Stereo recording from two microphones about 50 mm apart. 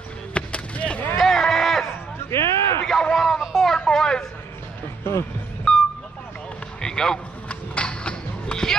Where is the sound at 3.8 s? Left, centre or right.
Centre.